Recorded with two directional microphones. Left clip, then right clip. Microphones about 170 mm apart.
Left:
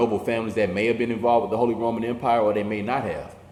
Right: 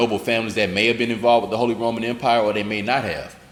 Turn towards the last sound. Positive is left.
turn(degrees=-40)  # may be behind; listen again after turning